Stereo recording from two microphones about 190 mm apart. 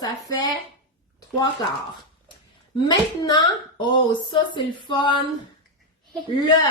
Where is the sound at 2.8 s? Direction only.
20° left (ahead or behind).